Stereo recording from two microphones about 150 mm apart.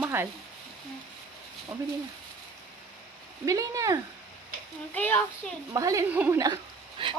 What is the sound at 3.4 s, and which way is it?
Speech, 20° right (ahead or behind).